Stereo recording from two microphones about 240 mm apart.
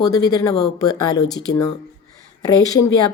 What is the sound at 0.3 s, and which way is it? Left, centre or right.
Speech, centre.